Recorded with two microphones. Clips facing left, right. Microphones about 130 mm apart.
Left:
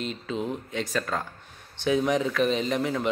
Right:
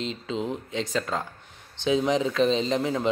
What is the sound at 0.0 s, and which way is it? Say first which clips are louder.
A man's voice: right 1 dB; 20° right (ahead or behind).